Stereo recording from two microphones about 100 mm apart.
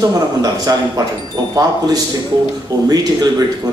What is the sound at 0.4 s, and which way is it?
Speech, 40° right (ahead or behind).